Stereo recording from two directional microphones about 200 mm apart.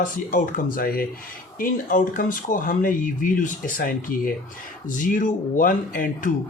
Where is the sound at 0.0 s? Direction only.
40° left (ahead or behind).